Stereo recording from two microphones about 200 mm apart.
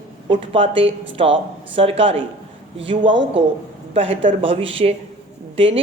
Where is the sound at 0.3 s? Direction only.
25° right (ahead or behind).